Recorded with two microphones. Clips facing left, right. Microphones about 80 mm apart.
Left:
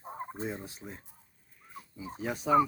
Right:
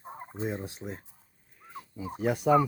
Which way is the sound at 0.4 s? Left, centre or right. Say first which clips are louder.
Right 8 dB; centre.